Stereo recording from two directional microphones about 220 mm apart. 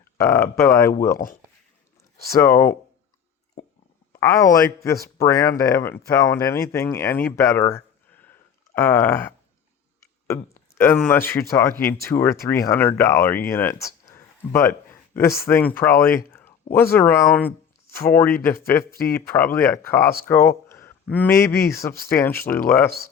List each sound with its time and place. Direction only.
0.2 s speech: 10° left (ahead or behind)
2.3 s speech: 10° left (ahead or behind)
4.2 s speech: 15° left (ahead or behind)